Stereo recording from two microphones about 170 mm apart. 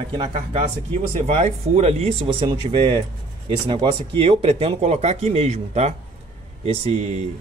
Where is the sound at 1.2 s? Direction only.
40° right (ahead or behind).